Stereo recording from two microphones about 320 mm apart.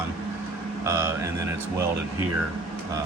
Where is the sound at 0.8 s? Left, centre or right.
Centre.